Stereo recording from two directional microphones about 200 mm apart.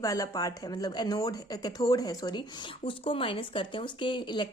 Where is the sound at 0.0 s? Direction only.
15° left (ahead or behind).